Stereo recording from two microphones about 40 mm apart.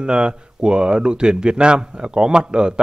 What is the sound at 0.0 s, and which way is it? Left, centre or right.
Speech, right.